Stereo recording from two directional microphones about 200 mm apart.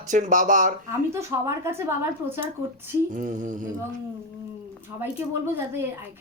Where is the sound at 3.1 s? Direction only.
35° right (ahead or behind).